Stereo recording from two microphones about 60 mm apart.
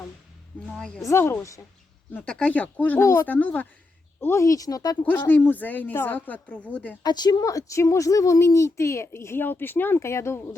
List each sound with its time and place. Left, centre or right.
0.8 s speech: centre
1.1 s speech: left
1.4 s a woman's voice: left
2.2 s speech: centre
2.5 s speech: left
3.0 s speech: left
3.2 s speech: left
4.4 s speech: left
5.0 s speech: left
7.3 s a woman's voice: left
8.4 s speech: left
10.0 s speech: left